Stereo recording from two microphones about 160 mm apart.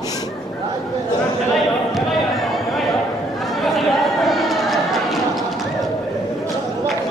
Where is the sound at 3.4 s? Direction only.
Centre (ahead or behind).